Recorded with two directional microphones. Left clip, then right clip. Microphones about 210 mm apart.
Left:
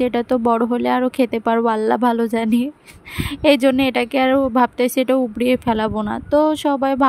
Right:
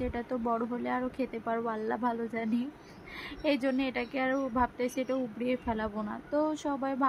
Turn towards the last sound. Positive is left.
turn(degrees=40)  # may be behind; listen again after turning